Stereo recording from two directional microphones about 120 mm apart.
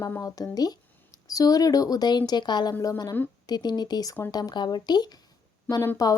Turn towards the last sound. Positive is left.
turn(degrees=30)  # may be behind; listen again after turning